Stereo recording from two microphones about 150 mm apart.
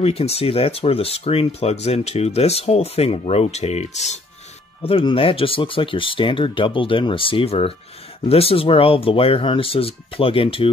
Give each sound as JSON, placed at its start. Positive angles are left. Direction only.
{"t": 0.0, "sound": "speech", "side_deg": 40}
{"t": 4.8, "sound": "speech", "side_deg": 40}